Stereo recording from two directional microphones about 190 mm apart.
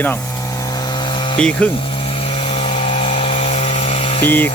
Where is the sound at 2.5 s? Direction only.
30° left (ahead or behind).